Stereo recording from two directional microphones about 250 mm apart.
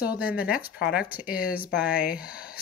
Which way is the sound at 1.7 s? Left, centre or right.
Centre.